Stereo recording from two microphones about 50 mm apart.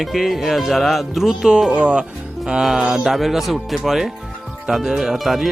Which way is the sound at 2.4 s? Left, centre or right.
Centre.